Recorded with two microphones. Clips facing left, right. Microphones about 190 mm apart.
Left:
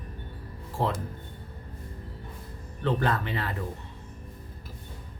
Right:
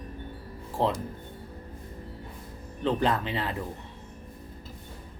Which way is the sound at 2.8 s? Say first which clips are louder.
Right 1 dB; 20° right (ahead or behind).